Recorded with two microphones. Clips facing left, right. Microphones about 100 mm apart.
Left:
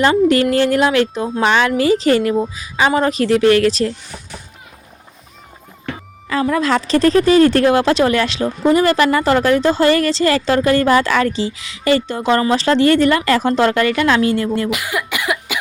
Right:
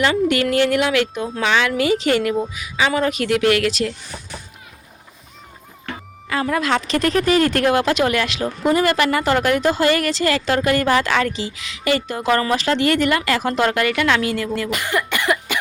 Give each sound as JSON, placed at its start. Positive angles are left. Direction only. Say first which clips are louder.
{"t": 0.0, "sound": "speech", "louder": "left 5 dB", "side_deg": 35}
{"t": 1.5, "sound": "a woman's voice", "louder": "left 4 dB", "side_deg": 50}
{"t": 1.7, "sound": "speech", "louder": "left 4 dB", "side_deg": 35}
{"t": 6.2, "sound": "speech", "louder": "left 4 dB", "side_deg": 35}
{"t": 14.7, "sound": "cough", "louder": "even", "side_deg": 5}